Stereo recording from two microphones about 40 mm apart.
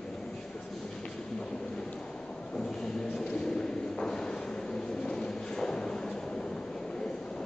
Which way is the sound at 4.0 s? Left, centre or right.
Centre.